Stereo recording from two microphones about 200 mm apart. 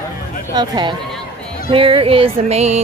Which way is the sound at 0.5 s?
20° right (ahead or behind).